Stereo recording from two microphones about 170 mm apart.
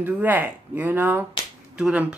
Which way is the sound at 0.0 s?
10° right (ahead or behind).